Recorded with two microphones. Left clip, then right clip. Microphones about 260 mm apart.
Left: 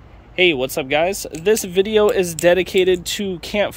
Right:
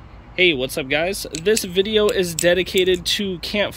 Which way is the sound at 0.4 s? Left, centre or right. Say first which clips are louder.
Left 1 dB; centre.